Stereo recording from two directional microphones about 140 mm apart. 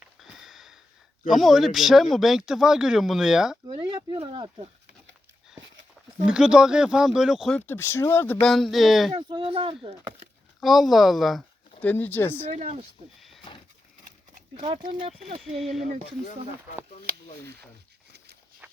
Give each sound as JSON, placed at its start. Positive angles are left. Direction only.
{"t": 0.2, "sound": "sniff", "side_deg": 0}
{"t": 1.3, "sound": "speech", "side_deg": 0}
{"t": 3.7, "sound": "speech", "side_deg": -35}
{"t": 6.2, "sound": "speech", "side_deg": -5}
{"t": 7.7, "sound": "speech", "side_deg": 15}
{"t": 8.4, "sound": "speech", "side_deg": 0}
{"t": 9.3, "sound": "speech", "side_deg": -40}
{"t": 10.6, "sound": "speech", "side_deg": 0}
{"t": 11.8, "sound": "speech", "side_deg": 10}
{"t": 12.5, "sound": "speech", "side_deg": -55}
{"t": 13.1, "sound": "a sound", "side_deg": 0}
{"t": 15.4, "sound": "speech", "side_deg": 0}
{"t": 18.6, "sound": "walk", "side_deg": -15}